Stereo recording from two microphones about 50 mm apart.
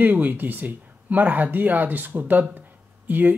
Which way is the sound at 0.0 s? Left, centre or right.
Right.